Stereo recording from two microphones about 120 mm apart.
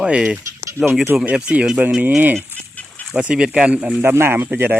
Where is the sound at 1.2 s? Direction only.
10° right (ahead or behind).